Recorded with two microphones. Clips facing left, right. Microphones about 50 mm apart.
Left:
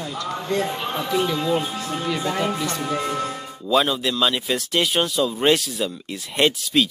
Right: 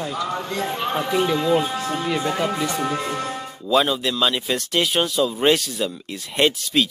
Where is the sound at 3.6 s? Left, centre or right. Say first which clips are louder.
Right 1 dB; centre.